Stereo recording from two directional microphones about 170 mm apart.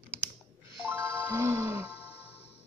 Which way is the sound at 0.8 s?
10° right (ahead or behind).